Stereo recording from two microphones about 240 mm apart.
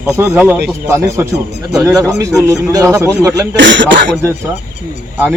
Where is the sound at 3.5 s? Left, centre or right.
Right.